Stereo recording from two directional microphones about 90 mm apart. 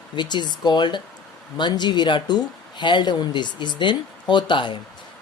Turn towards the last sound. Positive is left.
turn(degrees=60)  # may be behind; listen again after turning